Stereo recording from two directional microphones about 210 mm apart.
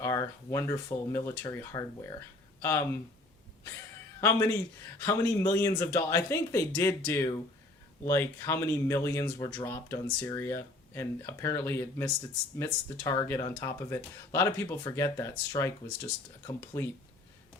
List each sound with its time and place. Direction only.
0.0 s a man's voice: 15° left (ahead or behind)
4.2 s a man's voice: 10° left (ahead or behind)